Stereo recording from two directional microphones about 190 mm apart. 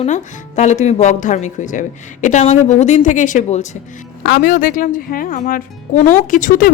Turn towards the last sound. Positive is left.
turn(degrees=45)  # may be behind; listen again after turning